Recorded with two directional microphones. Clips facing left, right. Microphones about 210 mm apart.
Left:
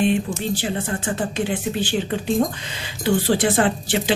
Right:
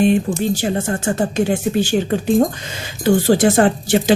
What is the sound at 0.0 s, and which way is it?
Speech, 45° right (ahead or behind).